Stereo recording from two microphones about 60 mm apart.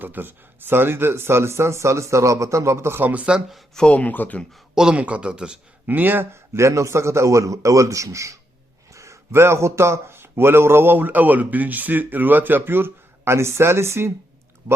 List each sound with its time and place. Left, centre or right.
0.0 s speech: right
3.0 s speech: right
3.8 s speech: centre
4.0 s speech: left
4.7 s speech: centre
4.9 s speech: right
5.8 s speech: right
6.6 s a man's voice: right